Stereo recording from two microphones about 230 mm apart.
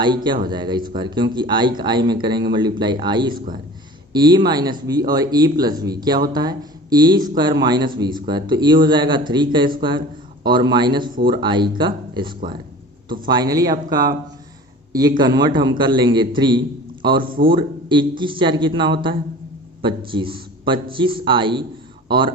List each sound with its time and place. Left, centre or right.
0.0 s a man's voice: centre
15.2 s a man's voice: centre